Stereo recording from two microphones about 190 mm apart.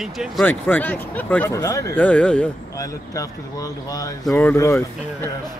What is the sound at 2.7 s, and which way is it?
Speech, 15° left (ahead or behind).